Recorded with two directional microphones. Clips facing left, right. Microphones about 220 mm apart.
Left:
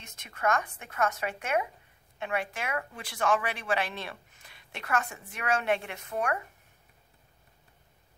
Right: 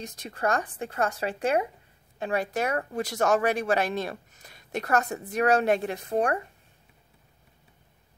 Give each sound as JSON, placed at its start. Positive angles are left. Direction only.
{"t": 0.0, "sound": "speech", "side_deg": -35}